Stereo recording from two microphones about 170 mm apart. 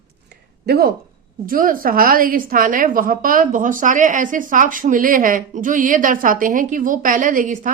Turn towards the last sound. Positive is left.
turn(degrees=-50)  # may be behind; listen again after turning